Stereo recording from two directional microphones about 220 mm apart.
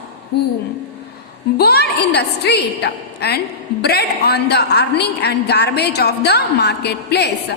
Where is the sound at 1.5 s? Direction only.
45° left (ahead or behind).